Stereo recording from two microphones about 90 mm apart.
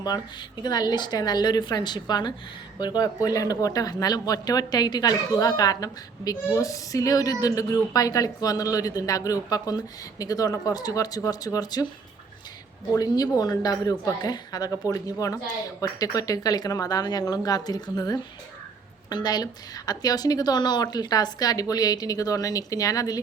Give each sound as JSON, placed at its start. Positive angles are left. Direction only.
{"t": 0.6, "sound": "a man's voice", "side_deg": 50}
{"t": 13.0, "sound": "a man's voice", "side_deg": 45}